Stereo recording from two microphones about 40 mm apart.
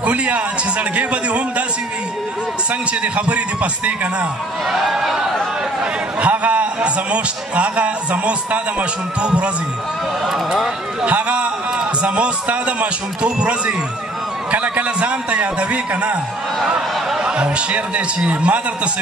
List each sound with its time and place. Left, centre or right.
0.0 s a man's voice: right
2.9 s a man's voice: right
4.6 s speech: centre
6.2 s a man's voice: right
10.2 s speech: centre
11.1 s a man's voice: right
15.9 s a man's voice: right
16.6 s a man's voice: right